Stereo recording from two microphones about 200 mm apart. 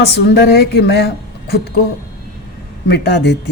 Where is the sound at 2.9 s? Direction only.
55° left (ahead or behind).